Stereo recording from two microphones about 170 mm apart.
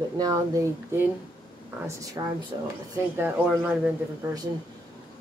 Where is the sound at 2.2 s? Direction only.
20° right (ahead or behind).